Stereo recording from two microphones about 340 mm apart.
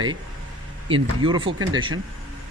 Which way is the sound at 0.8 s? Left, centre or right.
Centre.